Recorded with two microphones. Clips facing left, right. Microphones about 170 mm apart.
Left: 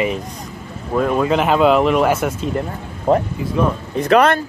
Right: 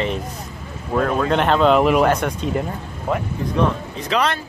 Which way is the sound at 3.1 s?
35° left (ahead or behind).